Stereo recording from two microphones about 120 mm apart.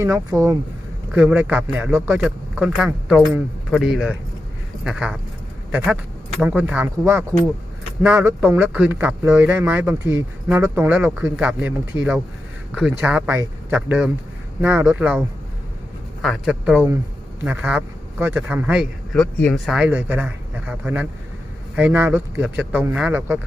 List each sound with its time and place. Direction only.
0.0 s speech: 25° right (ahead or behind)
1.1 s speech: 10° right (ahead or behind)
2.2 s speech: 5° right (ahead or behind)
16.2 s speech: centre (ahead or behind)
16.6 s speech: 15° right (ahead or behind)
19.1 s speech: 5° left (ahead or behind)
19.9 s speech: 15° right (ahead or behind)